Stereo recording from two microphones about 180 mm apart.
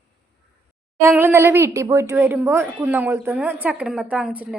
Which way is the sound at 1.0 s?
10° right (ahead or behind).